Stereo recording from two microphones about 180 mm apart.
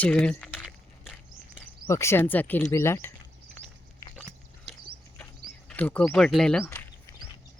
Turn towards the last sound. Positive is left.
turn(degrees=10)  # may be behind; listen again after turning